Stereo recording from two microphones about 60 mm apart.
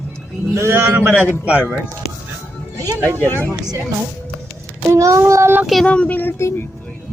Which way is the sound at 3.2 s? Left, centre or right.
Left.